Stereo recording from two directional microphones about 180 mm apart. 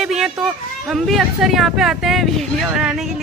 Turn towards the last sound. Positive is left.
turn(degrees=-5)  # may be behind; listen again after turning